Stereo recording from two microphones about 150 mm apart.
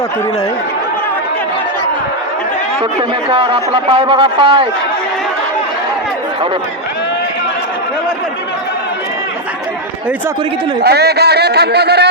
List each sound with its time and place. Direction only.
3.2 s a man's voice: 35° right (ahead or behind)
10.8 s a man's voice: 90° right